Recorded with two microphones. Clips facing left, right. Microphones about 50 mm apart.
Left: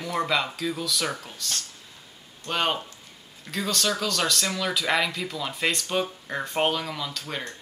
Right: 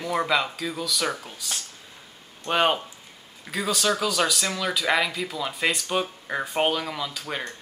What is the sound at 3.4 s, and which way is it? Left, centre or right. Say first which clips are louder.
Speech: right 2 dB; centre.